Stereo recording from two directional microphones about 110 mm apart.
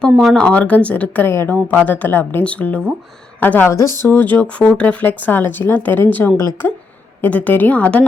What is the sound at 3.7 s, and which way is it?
Speech, 25° left (ahead or behind).